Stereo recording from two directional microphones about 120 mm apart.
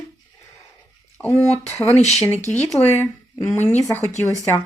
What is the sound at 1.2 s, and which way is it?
Speech, 15° left (ahead or behind).